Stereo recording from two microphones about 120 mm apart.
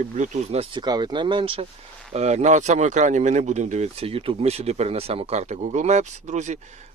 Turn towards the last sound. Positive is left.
turn(degrees=-80)